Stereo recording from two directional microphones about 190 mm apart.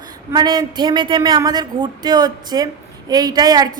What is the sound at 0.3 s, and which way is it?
A woman's voice, 20° right (ahead or behind).